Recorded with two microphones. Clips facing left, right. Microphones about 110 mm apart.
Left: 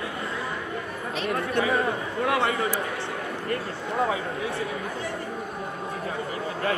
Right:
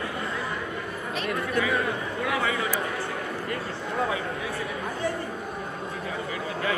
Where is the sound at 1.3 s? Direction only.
30° left (ahead or behind).